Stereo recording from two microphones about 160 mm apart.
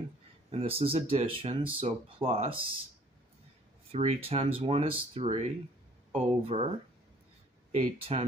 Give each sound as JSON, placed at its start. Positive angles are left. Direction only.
{"t": 0.5, "sound": "speech", "side_deg": -35}
{"t": 3.9, "sound": "speech", "side_deg": -40}
{"t": 7.7, "sound": "speech", "side_deg": -40}